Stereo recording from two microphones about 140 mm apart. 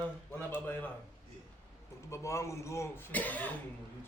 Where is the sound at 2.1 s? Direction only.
20° left (ahead or behind).